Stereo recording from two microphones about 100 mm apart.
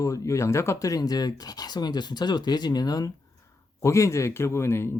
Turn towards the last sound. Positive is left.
turn(degrees=25)  # may be behind; listen again after turning